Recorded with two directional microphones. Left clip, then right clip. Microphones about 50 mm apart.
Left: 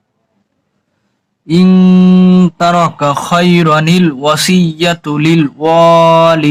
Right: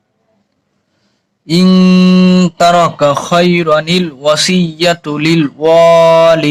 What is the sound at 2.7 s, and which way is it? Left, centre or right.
Speech, right.